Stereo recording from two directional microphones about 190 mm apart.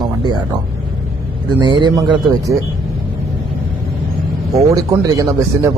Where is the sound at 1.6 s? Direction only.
25° right (ahead or behind).